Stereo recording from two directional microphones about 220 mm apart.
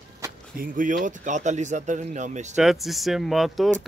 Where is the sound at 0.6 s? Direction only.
40° right (ahead or behind).